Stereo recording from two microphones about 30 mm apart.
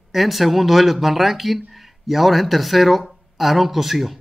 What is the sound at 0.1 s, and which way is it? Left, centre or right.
Speech, centre.